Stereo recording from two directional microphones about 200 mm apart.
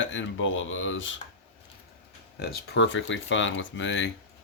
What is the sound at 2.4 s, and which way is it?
Speech, 60° left (ahead or behind).